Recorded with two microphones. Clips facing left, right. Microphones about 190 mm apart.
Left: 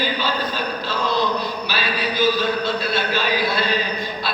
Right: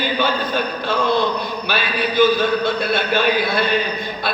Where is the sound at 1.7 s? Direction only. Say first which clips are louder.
Right 3 dB; 55° right (ahead or behind).